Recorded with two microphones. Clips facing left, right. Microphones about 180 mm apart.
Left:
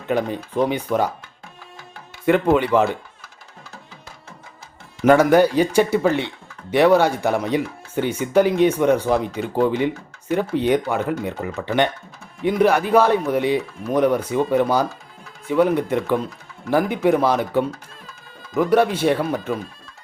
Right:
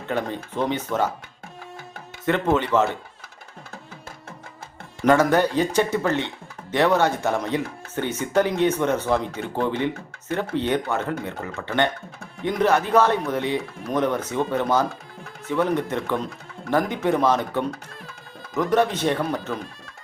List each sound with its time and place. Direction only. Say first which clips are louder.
0.1 s speech: left 5 dB; 10° left (ahead or behind)
2.2 s speech: left 5 dB; 10° left (ahead or behind)
5.0 s speech: left 4 dB; 10° left (ahead or behind)